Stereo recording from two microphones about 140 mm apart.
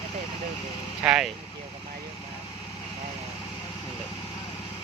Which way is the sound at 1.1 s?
5° right (ahead or behind).